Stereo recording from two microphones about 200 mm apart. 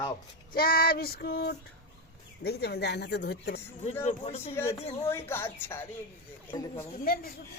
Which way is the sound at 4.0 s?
35° left (ahead or behind).